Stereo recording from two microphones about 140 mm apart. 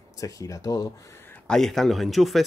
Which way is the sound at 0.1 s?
25° left (ahead or behind).